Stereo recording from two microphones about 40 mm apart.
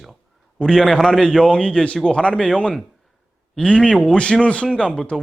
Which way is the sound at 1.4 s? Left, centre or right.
Left.